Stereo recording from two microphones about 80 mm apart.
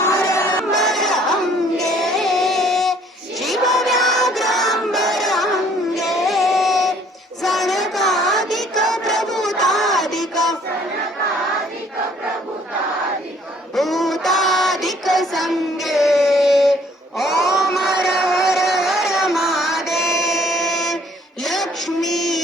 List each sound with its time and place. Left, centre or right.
0.0 s crowd: left
0.7 s crowd: centre
1.8 s music: centre
7.4 s child singing: centre
13.7 s child singing: centre
17.2 s a sound: centre